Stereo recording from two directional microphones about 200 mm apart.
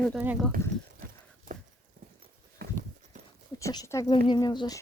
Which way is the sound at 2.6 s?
50° right (ahead or behind).